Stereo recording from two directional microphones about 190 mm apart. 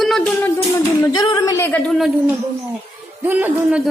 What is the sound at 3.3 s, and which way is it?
Speech, 10° right (ahead or behind).